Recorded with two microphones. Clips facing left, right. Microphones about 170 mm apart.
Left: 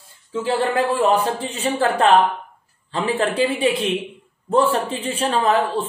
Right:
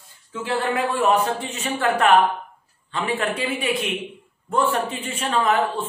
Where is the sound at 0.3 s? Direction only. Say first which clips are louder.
Left 4 dB; 30° left (ahead or behind).